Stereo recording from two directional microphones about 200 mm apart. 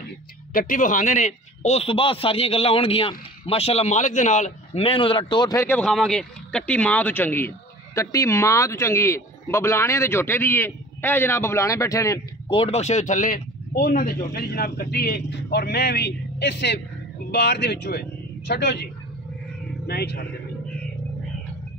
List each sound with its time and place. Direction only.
0.5 s a man's voice: 45° left (ahead or behind)
19.9 s speech: 50° left (ahead or behind)